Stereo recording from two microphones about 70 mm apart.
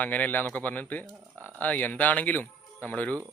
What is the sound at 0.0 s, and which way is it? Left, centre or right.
Speech, left.